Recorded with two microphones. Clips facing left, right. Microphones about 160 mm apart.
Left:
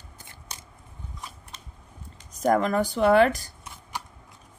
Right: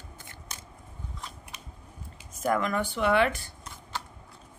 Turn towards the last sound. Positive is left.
turn(degrees=15)  # may be behind; listen again after turning